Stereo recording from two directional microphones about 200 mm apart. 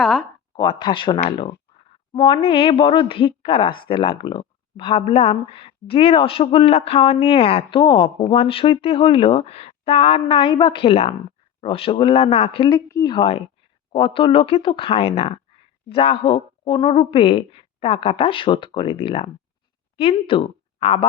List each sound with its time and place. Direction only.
0.0 s speech: 5° left (ahead or behind)
0.5 s a woman's voice: 25° left (ahead or behind)